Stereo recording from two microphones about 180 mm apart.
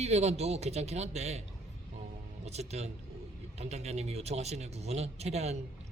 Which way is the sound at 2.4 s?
35° right (ahead or behind).